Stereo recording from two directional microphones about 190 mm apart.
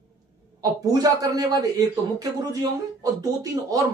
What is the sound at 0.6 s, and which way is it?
Speech, 20° right (ahead or behind).